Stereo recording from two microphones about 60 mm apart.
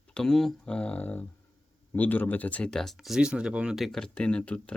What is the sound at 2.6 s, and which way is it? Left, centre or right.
Speech, centre.